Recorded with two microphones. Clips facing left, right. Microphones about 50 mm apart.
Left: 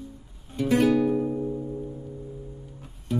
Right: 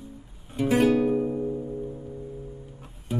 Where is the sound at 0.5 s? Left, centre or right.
Centre.